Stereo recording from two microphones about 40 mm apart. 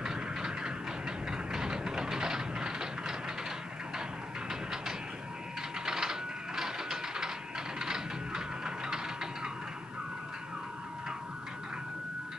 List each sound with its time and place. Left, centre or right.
0.0 s vehicle: centre
4.5 s a sound: centre
5.9 s mechanisms: centre
7.8 s music: centre